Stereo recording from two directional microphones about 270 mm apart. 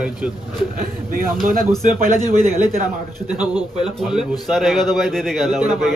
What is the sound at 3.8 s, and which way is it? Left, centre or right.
A man's voice, centre.